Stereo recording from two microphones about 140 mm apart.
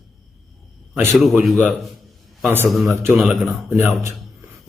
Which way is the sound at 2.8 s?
20° right (ahead or behind).